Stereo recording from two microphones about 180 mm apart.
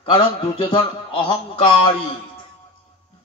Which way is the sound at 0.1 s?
30° left (ahead or behind).